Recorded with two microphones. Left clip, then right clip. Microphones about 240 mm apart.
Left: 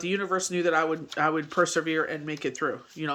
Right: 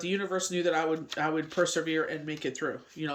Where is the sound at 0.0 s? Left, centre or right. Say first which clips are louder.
Left 3 dB; centre.